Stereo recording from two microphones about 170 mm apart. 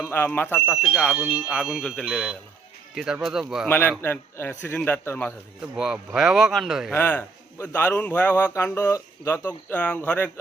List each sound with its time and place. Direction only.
0.0 s a man's voice: 10° left (ahead or behind)
0.7 s speech: 5° right (ahead or behind)
3.7 s a man's voice: 10° left (ahead or behind)
5.7 s speech: 5° right (ahead or behind)
6.9 s a man's voice: 10° left (ahead or behind)